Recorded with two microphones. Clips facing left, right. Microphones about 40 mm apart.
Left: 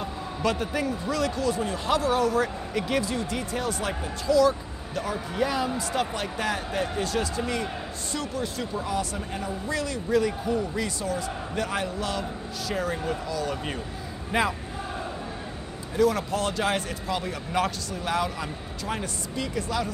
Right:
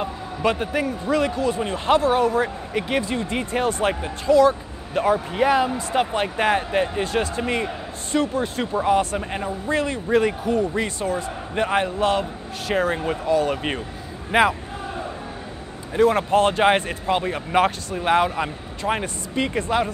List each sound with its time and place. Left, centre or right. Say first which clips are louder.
0.0 s a man's voice: right 5 dB; right
16.0 s speech: right 7 dB; right